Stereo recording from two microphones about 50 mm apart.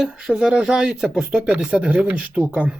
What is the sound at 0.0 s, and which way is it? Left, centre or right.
Speech, centre.